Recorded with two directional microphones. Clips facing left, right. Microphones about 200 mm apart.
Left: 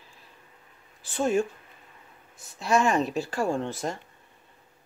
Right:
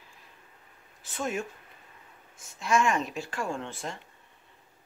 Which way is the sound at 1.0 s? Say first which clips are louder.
Left 8 dB; 30° left (ahead or behind).